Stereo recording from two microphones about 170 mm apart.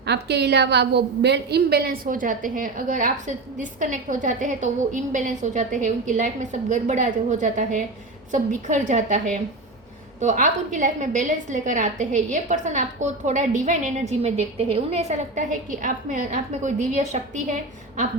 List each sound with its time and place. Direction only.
0.0 s a woman's voice: 80° right; by 18.0 s 45° right (ahead or behind)